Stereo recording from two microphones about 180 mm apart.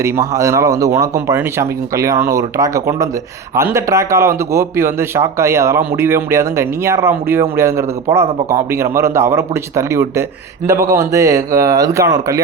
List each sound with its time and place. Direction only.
0.0 s a man's voice: 15° right (ahead or behind)